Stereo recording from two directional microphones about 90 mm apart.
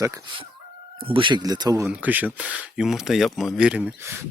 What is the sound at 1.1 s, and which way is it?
Speech, 70° right (ahead or behind).